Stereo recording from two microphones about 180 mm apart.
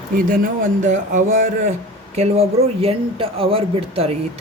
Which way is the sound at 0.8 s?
45° right (ahead or behind).